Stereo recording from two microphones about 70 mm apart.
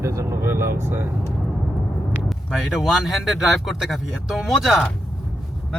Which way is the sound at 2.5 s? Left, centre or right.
Centre.